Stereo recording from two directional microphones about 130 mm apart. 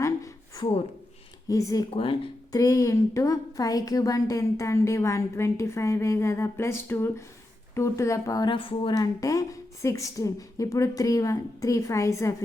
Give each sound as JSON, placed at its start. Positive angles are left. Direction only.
{"t": 0.0, "sound": "a sound", "side_deg": 25}
{"t": 1.5, "sound": "a woman's voice", "side_deg": 25}
{"t": 1.9, "sound": "speech", "side_deg": 45}
{"t": 2.5, "sound": "a woman's voice", "side_deg": 25}
{"t": 9.0, "sound": "a woman's voice", "side_deg": 25}